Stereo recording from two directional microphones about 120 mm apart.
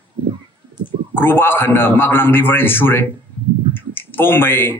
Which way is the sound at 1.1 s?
15° left (ahead or behind).